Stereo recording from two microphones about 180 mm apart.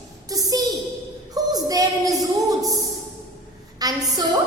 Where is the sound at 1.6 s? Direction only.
20° right (ahead or behind).